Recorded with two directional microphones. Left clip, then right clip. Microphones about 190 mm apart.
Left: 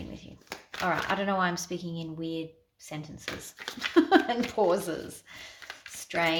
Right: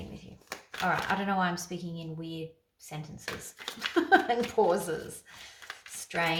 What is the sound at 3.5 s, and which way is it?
Speech, 15° left (ahead or behind).